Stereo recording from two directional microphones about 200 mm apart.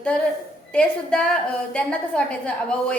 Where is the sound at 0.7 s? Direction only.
5° left (ahead or behind).